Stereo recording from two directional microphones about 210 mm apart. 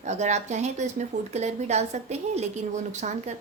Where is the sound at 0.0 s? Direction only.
35° right (ahead or behind).